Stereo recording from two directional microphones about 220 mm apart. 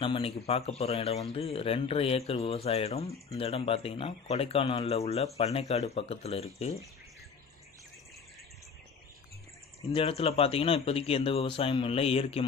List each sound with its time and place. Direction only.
0.0 s speech: 25° left (ahead or behind)
9.8 s speech: 25° left (ahead or behind)